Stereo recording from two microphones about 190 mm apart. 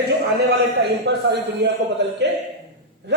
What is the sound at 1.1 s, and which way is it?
Speech, 65° right (ahead or behind).